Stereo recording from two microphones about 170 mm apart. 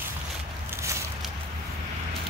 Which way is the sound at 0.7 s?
15° right (ahead or behind).